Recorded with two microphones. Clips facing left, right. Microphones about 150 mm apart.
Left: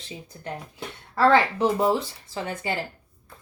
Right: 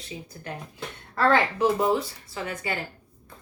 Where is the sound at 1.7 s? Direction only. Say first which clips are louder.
Left 1 dB; 30° left (ahead or behind).